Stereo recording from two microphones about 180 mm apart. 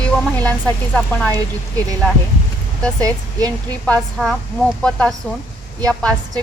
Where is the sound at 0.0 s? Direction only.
5° left (ahead or behind).